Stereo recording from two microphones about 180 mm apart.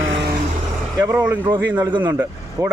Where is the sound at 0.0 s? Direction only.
90° right.